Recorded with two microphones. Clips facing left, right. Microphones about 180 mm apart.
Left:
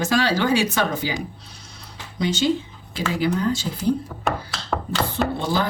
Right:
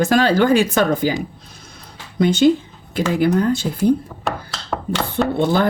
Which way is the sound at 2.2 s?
55° right (ahead or behind).